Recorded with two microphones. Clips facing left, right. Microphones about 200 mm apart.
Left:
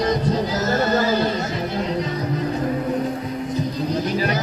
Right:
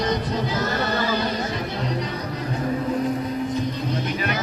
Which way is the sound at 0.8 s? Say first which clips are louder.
Left 7 dB; 40° left (ahead or behind).